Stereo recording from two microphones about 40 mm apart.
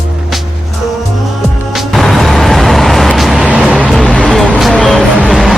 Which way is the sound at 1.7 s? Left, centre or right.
Centre.